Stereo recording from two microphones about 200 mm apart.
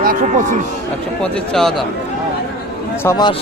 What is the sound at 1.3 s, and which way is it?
Speech, 5° left (ahead or behind).